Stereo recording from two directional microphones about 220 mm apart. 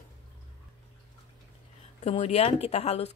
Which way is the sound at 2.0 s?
30° left (ahead or behind).